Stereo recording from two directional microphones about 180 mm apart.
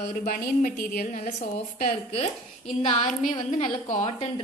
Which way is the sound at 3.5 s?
40° left (ahead or behind).